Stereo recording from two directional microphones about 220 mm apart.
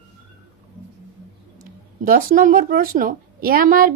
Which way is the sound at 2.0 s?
40° right (ahead or behind).